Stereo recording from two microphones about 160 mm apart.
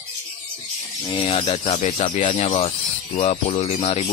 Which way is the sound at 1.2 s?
40° left (ahead or behind).